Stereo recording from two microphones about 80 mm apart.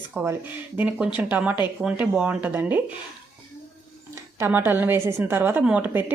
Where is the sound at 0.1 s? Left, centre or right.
Right.